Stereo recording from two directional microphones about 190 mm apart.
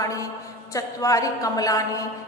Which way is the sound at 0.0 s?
15° left (ahead or behind).